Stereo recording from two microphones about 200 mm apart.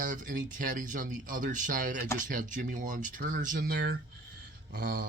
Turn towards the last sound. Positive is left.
turn(degrees=-50)  # may be behind; listen again after turning